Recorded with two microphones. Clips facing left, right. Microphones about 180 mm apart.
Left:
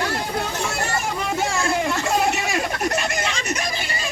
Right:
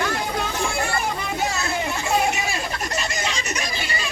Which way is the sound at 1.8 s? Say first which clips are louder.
Left 1 dB; 65° left (ahead or behind).